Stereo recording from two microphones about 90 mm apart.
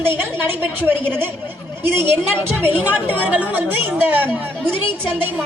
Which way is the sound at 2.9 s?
20° right (ahead or behind).